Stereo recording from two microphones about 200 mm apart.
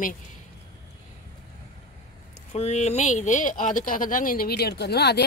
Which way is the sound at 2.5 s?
35° left (ahead or behind).